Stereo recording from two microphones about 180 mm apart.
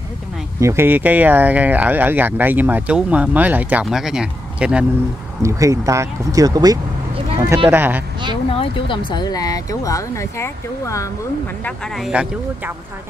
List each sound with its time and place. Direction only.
0.6 s speech: 15° right (ahead or behind)
5.4 s speech: 15° right (ahead or behind)
8.5 s speech: 30° left (ahead or behind)
11.6 s speech: centre (ahead or behind)